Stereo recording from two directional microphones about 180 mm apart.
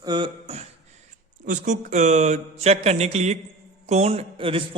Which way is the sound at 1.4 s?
45° right (ahead or behind).